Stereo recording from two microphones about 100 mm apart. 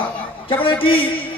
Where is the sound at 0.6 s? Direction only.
60° left (ahead or behind).